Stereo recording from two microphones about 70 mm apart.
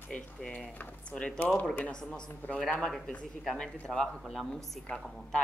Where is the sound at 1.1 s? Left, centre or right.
Centre.